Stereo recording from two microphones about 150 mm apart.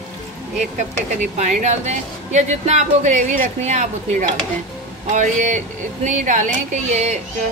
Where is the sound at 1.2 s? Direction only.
55° right (ahead or behind).